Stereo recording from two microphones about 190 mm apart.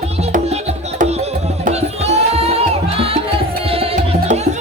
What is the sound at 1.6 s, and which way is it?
Music, 35° right (ahead or behind).